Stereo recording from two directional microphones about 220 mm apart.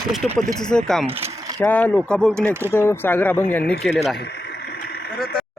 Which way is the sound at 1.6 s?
10° left (ahead or behind).